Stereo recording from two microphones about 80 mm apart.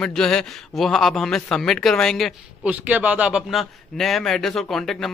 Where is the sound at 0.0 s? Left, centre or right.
Centre.